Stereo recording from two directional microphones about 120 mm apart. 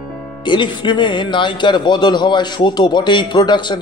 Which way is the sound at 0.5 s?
40° left (ahead or behind).